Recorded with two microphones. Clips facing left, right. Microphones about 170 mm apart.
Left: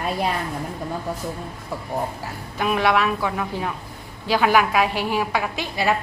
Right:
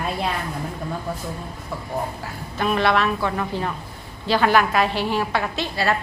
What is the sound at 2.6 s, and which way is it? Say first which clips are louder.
A woman's voice: even; 10° left (ahead or behind).